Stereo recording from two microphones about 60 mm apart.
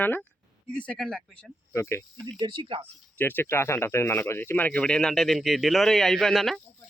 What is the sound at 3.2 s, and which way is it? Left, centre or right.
Speech, left.